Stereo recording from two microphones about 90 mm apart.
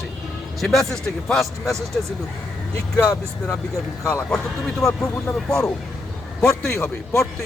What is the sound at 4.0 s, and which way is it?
Speech, 35° left (ahead or behind).